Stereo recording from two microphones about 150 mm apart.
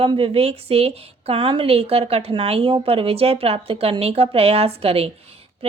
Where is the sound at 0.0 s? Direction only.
40° right (ahead or behind).